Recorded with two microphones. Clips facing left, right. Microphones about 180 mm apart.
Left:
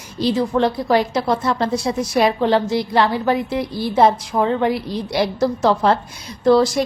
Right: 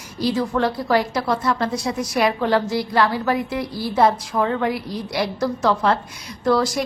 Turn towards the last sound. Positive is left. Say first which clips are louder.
# left 5 dB
turn(degrees=25)  # may be behind; listen again after turning